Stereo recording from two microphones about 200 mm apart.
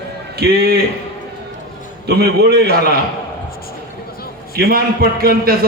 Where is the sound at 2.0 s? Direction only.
50° right (ahead or behind).